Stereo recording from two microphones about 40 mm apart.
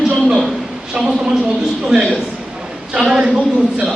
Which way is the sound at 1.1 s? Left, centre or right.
Right.